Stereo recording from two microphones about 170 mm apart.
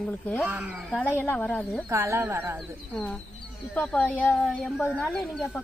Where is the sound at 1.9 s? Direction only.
15° right (ahead or behind).